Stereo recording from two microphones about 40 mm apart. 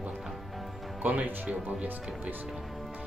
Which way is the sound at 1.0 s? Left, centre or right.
Right.